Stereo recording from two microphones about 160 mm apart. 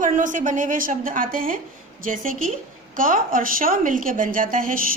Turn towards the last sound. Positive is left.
turn(degrees=-60)  # may be behind; listen again after turning